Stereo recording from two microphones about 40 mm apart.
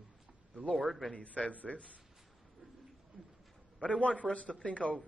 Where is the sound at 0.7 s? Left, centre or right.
Centre.